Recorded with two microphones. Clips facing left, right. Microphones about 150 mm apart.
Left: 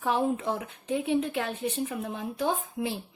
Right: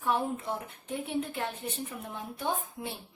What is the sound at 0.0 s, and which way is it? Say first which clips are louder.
Speech: left 4 dB; 90° left.